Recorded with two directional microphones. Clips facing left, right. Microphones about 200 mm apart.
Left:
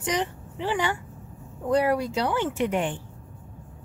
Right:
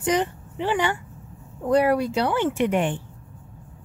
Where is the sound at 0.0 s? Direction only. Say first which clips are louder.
Right 5 dB; 50° right (ahead or behind).